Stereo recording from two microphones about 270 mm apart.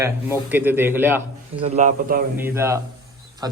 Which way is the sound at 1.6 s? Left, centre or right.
Right.